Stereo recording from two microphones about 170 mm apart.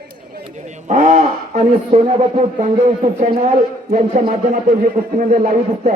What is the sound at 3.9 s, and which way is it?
A man's voice, 55° right (ahead or behind).